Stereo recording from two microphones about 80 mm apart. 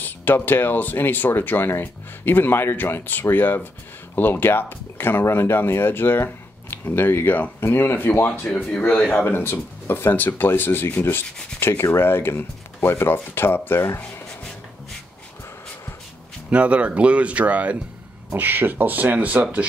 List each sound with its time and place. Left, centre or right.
0.0 s speech: left
8.6 s speech: centre
9.1 s speech: left
16.4 s speech: centre